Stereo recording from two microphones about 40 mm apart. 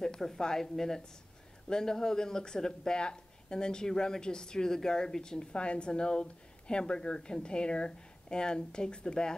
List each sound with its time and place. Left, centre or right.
0.0 s a woman's voice: centre